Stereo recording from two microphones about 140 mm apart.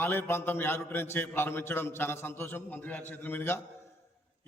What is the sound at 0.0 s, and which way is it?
A man's voice, 15° left (ahead or behind).